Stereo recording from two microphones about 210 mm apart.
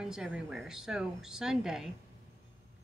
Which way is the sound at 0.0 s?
5° right (ahead or behind).